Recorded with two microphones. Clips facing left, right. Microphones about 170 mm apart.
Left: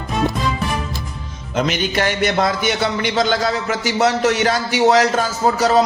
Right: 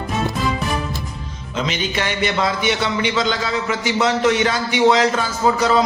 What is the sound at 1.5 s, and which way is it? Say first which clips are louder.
Speech: left 4 dB; 50° left (ahead or behind).